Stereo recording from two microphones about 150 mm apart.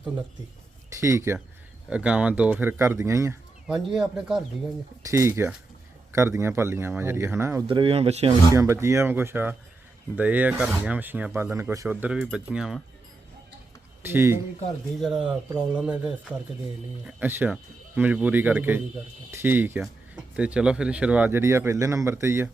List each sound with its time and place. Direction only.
1.0 s speech: 20° right (ahead or behind)
1.9 s speech: 10° right (ahead or behind)
3.7 s speech: centre (ahead or behind)
5.0 s speech: 20° right (ahead or behind)
7.7 s speech: 40° right (ahead or behind)
8.5 s speech: 20° right (ahead or behind)
14.0 s speech: 15° right (ahead or behind)
15.0 s speech: 5° right (ahead or behind)